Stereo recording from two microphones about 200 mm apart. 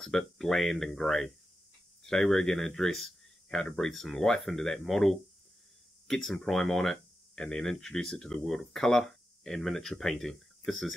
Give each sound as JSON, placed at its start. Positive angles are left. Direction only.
{"t": 0.0, "sound": "speech", "side_deg": 0}